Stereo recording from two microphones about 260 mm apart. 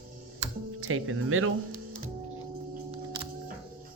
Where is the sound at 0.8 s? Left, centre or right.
Right.